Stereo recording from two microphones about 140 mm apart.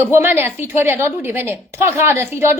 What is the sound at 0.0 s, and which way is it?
A woman's voice, 15° right (ahead or behind).